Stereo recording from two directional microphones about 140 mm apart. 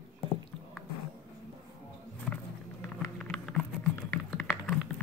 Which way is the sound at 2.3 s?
Centre (ahead or behind).